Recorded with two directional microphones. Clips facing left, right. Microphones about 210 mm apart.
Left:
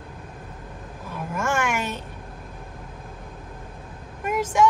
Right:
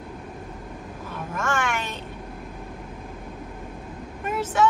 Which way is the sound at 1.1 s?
10° left (ahead or behind).